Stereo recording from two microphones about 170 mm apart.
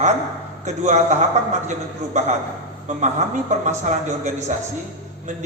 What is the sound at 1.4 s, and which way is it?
Speech, 45° right (ahead or behind).